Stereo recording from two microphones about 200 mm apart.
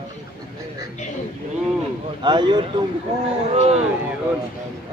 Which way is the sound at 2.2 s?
20° right (ahead or behind).